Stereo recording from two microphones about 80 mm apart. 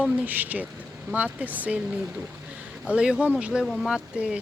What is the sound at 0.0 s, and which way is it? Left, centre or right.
Speech, right.